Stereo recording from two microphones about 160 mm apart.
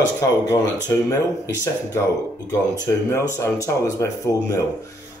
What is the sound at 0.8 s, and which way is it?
Speech, 20° left (ahead or behind).